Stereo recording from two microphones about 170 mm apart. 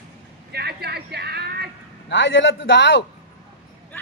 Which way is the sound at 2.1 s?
90° left.